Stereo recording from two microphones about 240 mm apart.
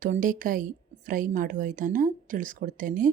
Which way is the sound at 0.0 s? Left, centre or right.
Right.